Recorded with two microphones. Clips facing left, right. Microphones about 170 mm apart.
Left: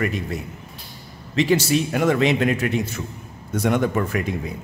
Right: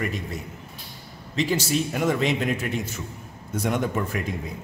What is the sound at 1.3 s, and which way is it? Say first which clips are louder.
A man's voice: left 5 dB; 70° left (ahead or behind).